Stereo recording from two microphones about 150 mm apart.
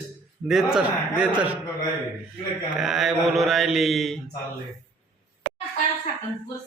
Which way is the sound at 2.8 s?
Centre (ahead or behind).